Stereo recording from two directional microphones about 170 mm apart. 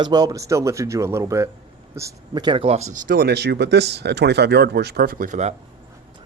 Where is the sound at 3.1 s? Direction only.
65° right (ahead or behind); by 5.5 s 45° right (ahead or behind).